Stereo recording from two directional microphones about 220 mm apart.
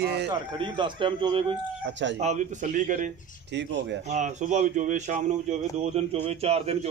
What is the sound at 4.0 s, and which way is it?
A man's voice, 35° right (ahead or behind).